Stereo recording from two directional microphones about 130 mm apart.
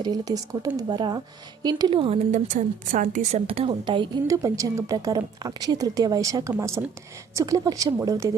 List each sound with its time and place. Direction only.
0.0 s a woman's voice: 30° right (ahead or behind)
2.1 s a woman's voice: 70° right (ahead or behind)
3.3 s a woman's voice: 50° right (ahead or behind)
4.3 s a woman's voice: 25° right (ahead or behind)